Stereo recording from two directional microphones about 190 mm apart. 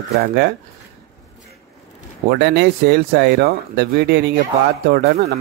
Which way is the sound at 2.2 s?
65° right (ahead or behind).